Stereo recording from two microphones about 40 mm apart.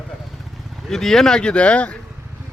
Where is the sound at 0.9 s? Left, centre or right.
Centre; by 2.0 s left.